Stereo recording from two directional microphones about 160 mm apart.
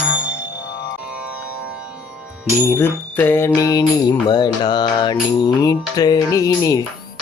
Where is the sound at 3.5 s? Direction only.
25° left (ahead or behind).